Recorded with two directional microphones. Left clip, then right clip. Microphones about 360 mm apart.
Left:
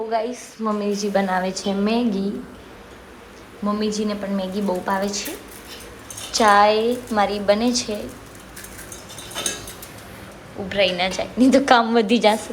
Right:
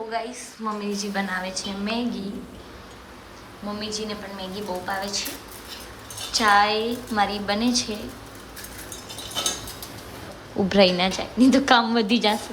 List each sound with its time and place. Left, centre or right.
0.1 s a woman's voice: centre
3.8 s a woman's voice: centre
6.3 s a woman's voice: centre
10.7 s a woman's voice: centre